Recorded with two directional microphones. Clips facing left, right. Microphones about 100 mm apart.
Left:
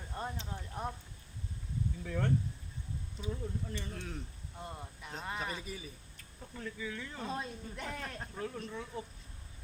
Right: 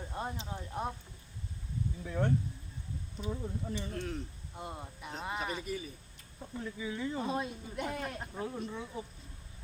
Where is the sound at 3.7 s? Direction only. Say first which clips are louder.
Right 5 dB; 15° right (ahead or behind).